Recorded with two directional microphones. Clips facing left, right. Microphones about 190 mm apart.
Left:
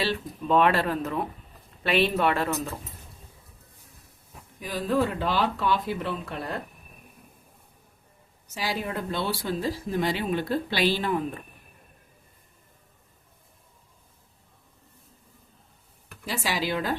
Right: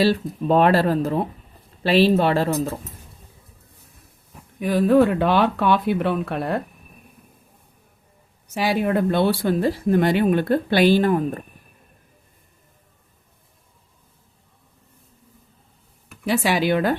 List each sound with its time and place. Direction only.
0.0 s speech: 40° right (ahead or behind)
4.6 s speech: 60° right (ahead or behind)
8.4 s speech: 65° right (ahead or behind); by 11.4 s 45° right (ahead or behind)
16.2 s speech: 65° right (ahead or behind)